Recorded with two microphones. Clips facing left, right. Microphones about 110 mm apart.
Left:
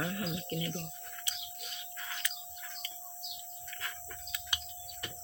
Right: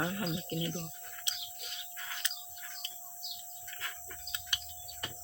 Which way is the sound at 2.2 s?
20° right (ahead or behind).